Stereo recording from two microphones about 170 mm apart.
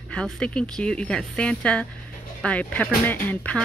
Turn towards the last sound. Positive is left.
turn(degrees=10)  # may be behind; listen again after turning